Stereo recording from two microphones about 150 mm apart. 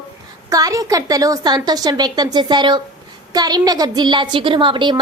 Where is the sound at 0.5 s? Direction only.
25° right (ahead or behind).